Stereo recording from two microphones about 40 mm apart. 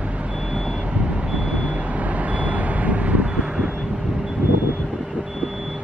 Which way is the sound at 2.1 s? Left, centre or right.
Right.